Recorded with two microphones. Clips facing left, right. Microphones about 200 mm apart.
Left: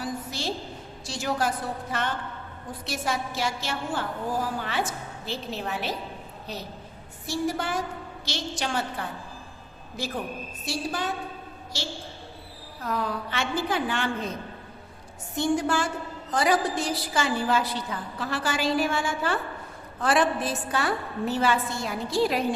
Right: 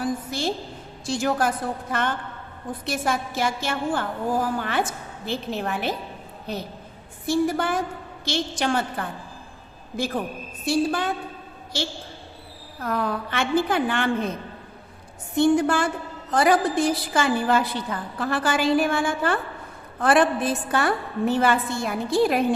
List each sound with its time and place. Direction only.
0.0 s a sound: 55° right (ahead or behind)
1.0 s a woman's voice: 55° right (ahead or behind)
10.7 s a woman's voice: 55° right (ahead or behind)
12.8 s a woman's voice: 55° right (ahead or behind)
15.4 s a woman's voice: 55° right (ahead or behind)